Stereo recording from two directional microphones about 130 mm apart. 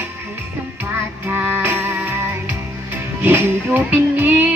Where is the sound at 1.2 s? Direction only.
15° right (ahead or behind).